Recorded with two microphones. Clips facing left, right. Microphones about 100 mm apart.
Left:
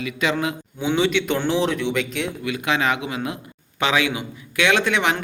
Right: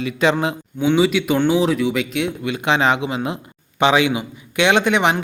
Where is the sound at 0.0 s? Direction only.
30° right (ahead or behind).